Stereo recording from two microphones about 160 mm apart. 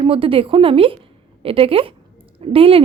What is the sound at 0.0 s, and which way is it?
Speech, 35° right (ahead or behind).